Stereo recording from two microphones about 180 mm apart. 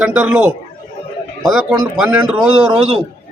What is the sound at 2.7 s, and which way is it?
Speech, 35° right (ahead or behind).